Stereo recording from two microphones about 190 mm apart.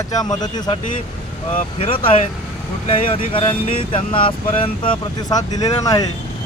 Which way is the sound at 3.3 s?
25° left (ahead or behind).